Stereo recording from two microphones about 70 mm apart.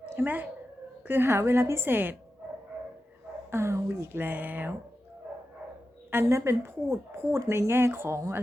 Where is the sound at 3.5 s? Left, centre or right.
Right.